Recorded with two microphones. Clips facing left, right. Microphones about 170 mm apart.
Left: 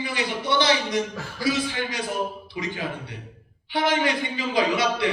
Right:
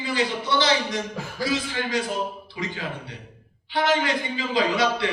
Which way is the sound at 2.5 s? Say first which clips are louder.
Left 1 dB; 20° left (ahead or behind).